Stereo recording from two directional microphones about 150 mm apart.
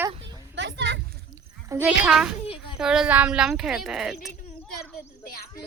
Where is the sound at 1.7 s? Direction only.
10° right (ahead or behind).